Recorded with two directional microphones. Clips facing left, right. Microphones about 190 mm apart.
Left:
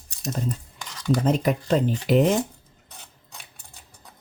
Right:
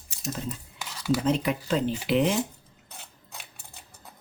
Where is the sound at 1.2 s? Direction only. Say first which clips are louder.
Left 3 dB; 45° left (ahead or behind).